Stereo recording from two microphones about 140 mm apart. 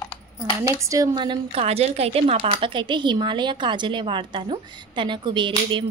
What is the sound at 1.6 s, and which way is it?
Speech, 45° right (ahead or behind).